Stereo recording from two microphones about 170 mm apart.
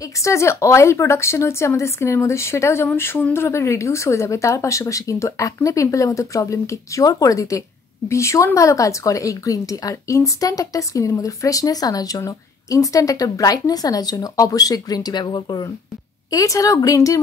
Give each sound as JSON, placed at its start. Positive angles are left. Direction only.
{"t": 0.2, "sound": "a woman's voice", "side_deg": 15}